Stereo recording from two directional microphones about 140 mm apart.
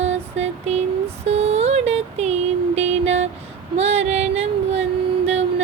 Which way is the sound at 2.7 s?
50° right (ahead or behind).